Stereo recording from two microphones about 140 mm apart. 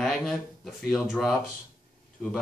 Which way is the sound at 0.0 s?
Centre (ahead or behind).